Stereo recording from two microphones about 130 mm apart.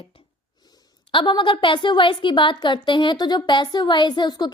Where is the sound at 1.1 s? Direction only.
40° left (ahead or behind).